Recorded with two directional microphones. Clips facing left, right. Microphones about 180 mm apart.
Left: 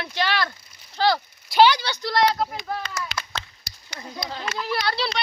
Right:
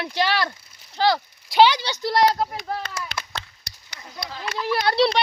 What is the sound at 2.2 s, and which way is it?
A child's voice, 30° right (ahead or behind).